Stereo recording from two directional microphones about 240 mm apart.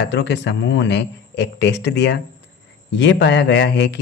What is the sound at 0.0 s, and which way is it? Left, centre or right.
A man's voice, left.